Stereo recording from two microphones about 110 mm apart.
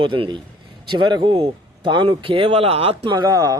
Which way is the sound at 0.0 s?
50° right (ahead or behind).